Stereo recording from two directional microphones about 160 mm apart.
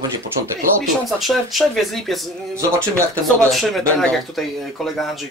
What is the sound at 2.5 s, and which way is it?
Speech, 15° right (ahead or behind).